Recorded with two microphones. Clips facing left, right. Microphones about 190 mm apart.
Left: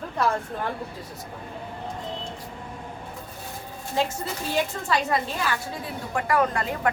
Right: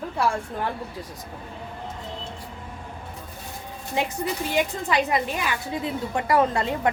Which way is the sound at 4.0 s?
15° right (ahead or behind).